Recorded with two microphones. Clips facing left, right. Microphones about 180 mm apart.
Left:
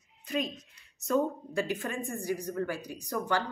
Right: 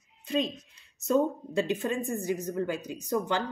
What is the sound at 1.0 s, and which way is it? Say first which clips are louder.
Speech: right 3 dB; 25° right (ahead or behind).